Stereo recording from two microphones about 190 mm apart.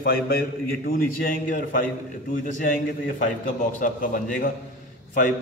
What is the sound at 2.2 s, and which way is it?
A man's voice, 45° left (ahead or behind).